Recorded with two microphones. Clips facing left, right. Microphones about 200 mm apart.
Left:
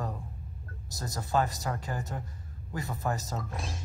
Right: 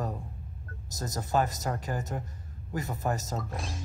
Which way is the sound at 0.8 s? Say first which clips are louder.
Right 2 dB; 45° right (ahead or behind).